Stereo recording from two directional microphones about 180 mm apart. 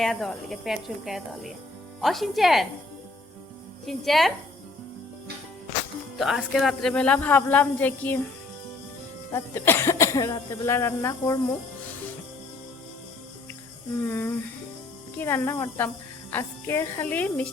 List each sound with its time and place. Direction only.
0.0 s speech: centre (ahead or behind)
3.8 s speech: centre (ahead or behind)
6.1 s speech: centre (ahead or behind)
9.3 s speech: 15° left (ahead or behind)
14.1 s speech: 10° left (ahead or behind)